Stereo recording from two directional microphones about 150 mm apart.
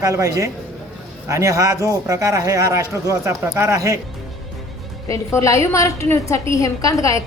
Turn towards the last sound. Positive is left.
turn(degrees=20)  # may be behind; listen again after turning